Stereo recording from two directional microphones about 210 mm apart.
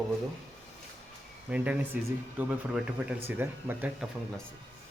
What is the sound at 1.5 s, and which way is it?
Speech, 5° right (ahead or behind).